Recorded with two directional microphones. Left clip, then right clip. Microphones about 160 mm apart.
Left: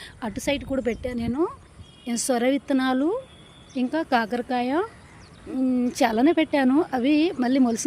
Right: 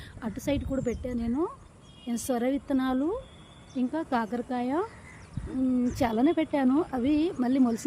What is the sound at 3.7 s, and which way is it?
A woman's voice, 15° left (ahead or behind).